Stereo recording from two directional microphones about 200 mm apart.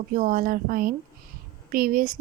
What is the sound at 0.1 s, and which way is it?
Speech, 45° right (ahead or behind).